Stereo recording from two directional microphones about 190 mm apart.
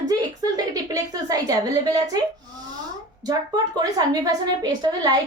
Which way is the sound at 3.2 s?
20° right (ahead or behind).